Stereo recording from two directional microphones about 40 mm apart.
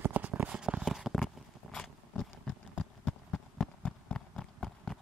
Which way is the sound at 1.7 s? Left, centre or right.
Centre.